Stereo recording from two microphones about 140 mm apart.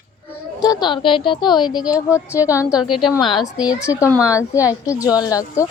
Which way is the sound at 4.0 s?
20° left (ahead or behind).